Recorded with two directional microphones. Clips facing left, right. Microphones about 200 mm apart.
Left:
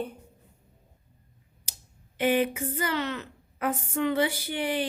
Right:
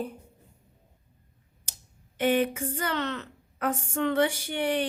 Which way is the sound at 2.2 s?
10° left (ahead or behind).